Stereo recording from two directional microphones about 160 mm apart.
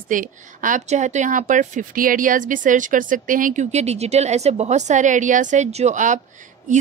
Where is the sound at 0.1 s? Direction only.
55° right (ahead or behind).